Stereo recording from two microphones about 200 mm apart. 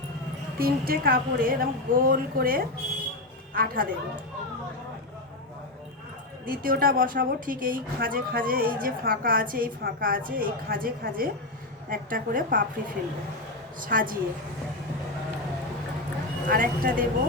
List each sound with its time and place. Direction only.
0.6 s a woman's voice: 50° right (ahead or behind)
6.4 s a woman's voice: 45° right (ahead or behind)
13.8 s a woman's voice: 45° right (ahead or behind)
16.5 s a woman's voice: 45° right (ahead or behind)